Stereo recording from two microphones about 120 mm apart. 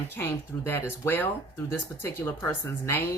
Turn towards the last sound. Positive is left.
turn(degrees=25)  # may be behind; listen again after turning